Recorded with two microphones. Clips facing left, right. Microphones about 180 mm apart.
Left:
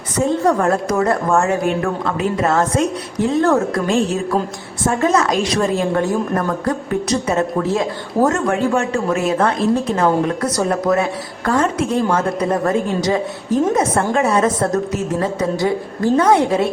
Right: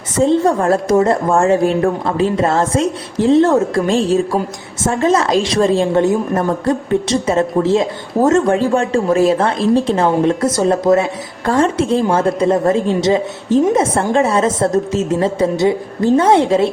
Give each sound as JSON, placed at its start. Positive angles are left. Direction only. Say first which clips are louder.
{"t": 0.4, "sound": "a woman's voice", "louder": "right 2 dB", "side_deg": -25}